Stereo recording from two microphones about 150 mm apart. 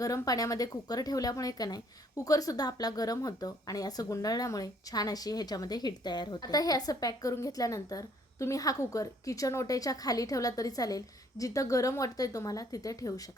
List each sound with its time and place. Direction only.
0.0 s speech: 25° left (ahead or behind)